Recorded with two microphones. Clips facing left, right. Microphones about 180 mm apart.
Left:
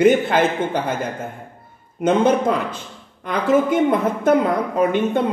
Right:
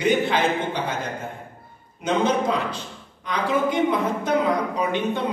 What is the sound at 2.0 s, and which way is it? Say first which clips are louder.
A woman's voice: left 5 dB; 50° left (ahead or behind).